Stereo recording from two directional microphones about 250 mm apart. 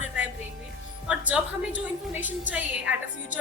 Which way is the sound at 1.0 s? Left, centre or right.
Centre.